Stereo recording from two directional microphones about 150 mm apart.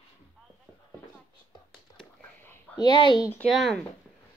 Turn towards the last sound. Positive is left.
turn(degrees=0)  # may be behind; listen again after turning